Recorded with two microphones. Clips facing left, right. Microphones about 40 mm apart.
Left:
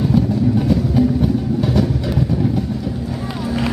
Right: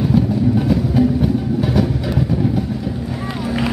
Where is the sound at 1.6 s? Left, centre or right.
Centre.